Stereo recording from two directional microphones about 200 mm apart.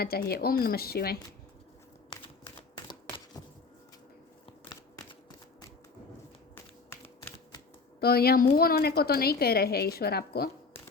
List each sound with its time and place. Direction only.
0.0 s a woman's voice: 50° left (ahead or behind)
2.1 s a sound: 25° left (ahead or behind)
2.7 s typing: 20° left (ahead or behind)
8.0 s a woman's voice: 50° left (ahead or behind)